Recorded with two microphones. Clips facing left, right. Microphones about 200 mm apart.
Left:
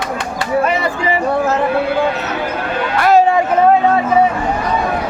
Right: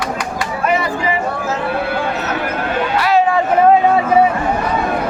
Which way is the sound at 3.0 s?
45° left (ahead or behind).